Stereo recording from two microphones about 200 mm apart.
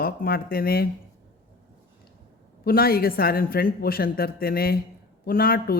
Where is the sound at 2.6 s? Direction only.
50° left (ahead or behind).